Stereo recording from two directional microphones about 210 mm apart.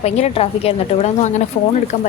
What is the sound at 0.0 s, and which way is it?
A woman's voice, 30° left (ahead or behind).